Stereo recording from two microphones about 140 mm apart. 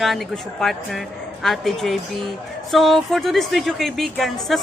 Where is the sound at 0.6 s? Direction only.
Centre (ahead or behind).